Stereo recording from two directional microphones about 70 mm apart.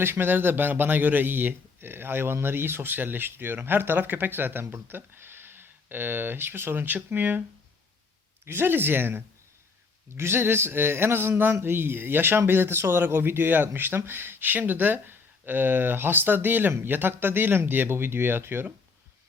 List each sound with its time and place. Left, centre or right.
0.0 s a man's voice: right
8.4 s speech: right